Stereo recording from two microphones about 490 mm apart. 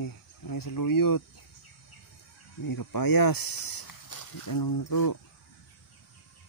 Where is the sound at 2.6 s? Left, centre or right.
Left.